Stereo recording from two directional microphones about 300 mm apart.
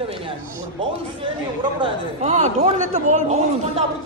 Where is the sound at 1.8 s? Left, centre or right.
Right.